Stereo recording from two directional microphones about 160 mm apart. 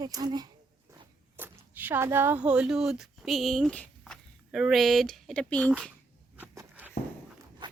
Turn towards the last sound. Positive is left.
turn(degrees=-10)  # may be behind; listen again after turning